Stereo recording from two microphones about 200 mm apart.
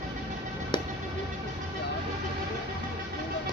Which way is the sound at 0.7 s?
20° left (ahead or behind).